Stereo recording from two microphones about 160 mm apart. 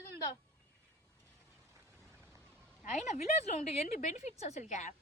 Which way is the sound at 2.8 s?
45° left (ahead or behind).